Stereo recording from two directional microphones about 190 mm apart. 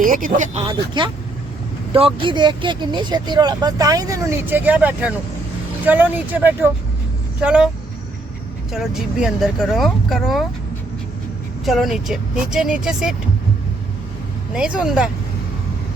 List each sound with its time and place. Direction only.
0.0 s speech: 45° right (ahead or behind)
0.6 s speech: 25° right (ahead or behind); by 7.7 s 5° right (ahead or behind)
8.7 s speech: 5° right (ahead or behind)
11.6 s speech: centre (ahead or behind)
14.5 s speech: 5° right (ahead or behind)